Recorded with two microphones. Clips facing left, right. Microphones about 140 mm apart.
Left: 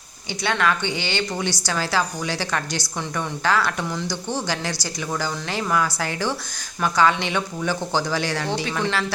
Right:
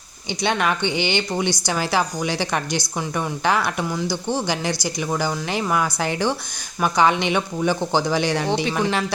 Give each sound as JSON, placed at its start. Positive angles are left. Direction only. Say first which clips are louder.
{"t": 0.4, "sound": "speech", "louder": "right 1 dB", "side_deg": -20}